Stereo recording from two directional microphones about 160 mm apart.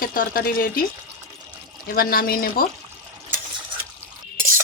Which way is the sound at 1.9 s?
65° left (ahead or behind).